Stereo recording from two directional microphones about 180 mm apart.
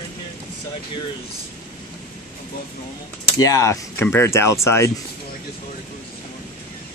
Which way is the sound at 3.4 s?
20° left (ahead or behind).